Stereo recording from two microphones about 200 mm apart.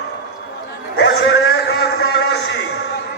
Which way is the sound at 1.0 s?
60° left (ahead or behind).